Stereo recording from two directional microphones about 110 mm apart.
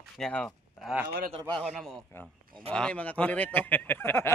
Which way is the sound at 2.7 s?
10° left (ahead or behind).